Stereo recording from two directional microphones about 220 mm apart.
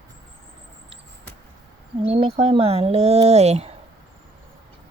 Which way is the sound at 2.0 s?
25° right (ahead or behind).